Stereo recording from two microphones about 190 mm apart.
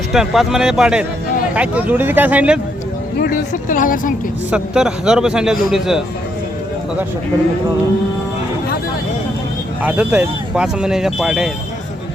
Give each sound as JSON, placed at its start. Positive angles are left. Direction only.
{"t": 0.1, "sound": "speech", "side_deg": 0}
{"t": 3.2, "sound": "speech", "side_deg": 50}
{"t": 4.5, "sound": "speech", "side_deg": -5}
{"t": 9.8, "sound": "speech", "side_deg": -10}